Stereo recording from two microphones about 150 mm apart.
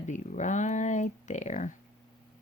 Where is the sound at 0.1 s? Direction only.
55° left (ahead or behind).